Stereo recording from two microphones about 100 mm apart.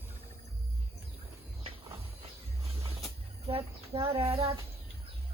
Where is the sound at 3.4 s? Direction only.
65° right (ahead or behind); by 4.5 s 85° right.